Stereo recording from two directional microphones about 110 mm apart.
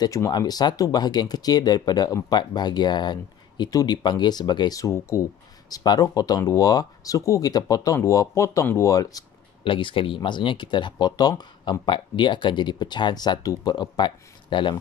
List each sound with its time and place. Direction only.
0.0 s speech: 35° left (ahead or behind)
9.7 s speech: 50° left (ahead or behind)